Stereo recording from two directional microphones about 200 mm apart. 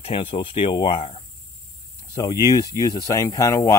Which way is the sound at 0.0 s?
25° left (ahead or behind).